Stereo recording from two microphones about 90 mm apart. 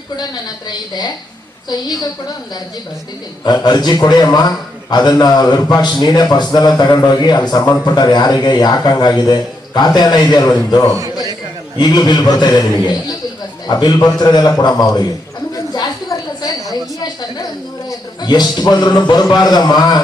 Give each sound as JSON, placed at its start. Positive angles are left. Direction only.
{"t": 0.2, "sound": "a man's voice", "side_deg": 50}
{"t": 3.4, "sound": "a man's voice", "side_deg": 50}
{"t": 10.9, "sound": "a sound", "side_deg": -45}
{"t": 11.8, "sound": "a man's voice", "side_deg": 50}
{"t": 15.7, "sound": "a sound", "side_deg": 45}
{"t": 16.7, "sound": "a woman's voice", "side_deg": 50}